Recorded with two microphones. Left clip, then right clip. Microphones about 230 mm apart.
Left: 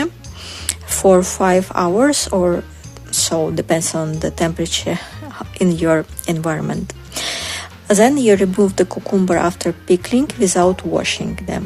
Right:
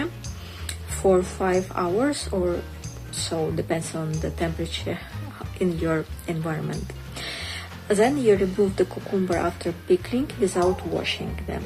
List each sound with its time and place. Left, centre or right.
0.7 s a woman's voice: left
6.8 s music: left
7.9 s a woman's voice: left